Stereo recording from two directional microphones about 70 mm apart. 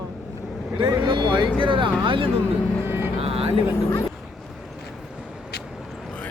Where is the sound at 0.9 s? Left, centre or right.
Right.